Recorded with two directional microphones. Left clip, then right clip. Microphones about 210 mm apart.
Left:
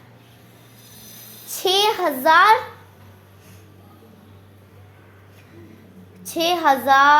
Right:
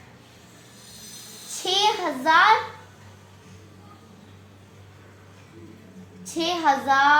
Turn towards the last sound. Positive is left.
turn(degrees=55)  # may be behind; listen again after turning